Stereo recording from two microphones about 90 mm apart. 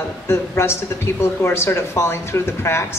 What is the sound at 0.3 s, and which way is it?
Speech, 30° left (ahead or behind).